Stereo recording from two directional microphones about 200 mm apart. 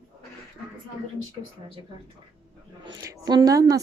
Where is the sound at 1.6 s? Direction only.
25° right (ahead or behind).